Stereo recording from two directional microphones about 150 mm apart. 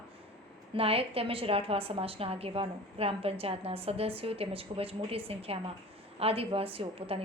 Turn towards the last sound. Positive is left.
turn(degrees=-40)  # may be behind; listen again after turning